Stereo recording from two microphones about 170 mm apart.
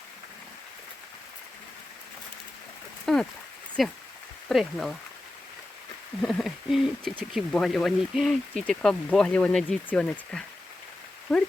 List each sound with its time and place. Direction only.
3.1 s speech: centre (ahead or behind)
6.2 s speech: centre (ahead or behind)